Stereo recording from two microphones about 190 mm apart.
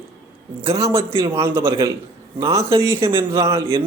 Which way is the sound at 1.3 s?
15° right (ahead or behind).